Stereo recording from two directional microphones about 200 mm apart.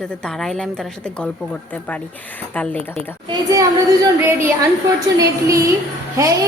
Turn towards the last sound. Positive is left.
turn(degrees=-15)  # may be behind; listen again after turning